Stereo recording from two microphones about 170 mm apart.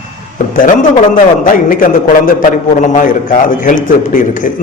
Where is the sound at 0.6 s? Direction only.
50° left (ahead or behind).